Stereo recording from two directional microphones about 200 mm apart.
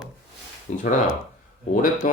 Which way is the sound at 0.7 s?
40° left (ahead or behind).